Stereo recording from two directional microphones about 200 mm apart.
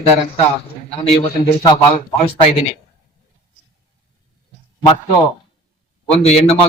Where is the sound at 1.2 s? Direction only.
30° left (ahead or behind).